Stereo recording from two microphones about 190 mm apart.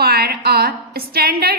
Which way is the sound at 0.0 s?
55° right (ahead or behind).